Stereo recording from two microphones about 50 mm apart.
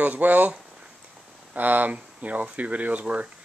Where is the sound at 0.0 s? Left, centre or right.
Right.